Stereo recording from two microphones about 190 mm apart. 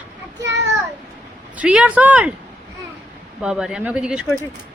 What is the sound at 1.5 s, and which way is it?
Speech, 5° right (ahead or behind).